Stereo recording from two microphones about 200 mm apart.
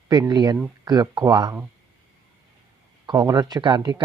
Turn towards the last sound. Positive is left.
turn(degrees=-20)  # may be behind; listen again after turning